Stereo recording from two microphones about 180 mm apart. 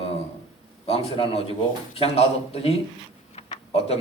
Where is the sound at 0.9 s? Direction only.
30° left (ahead or behind).